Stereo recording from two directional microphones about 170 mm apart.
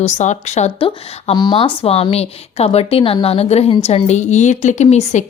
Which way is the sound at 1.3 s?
25° left (ahead or behind).